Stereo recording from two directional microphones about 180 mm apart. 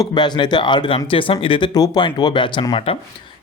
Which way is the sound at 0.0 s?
25° left (ahead or behind).